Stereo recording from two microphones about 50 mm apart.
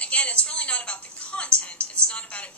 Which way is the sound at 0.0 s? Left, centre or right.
Left.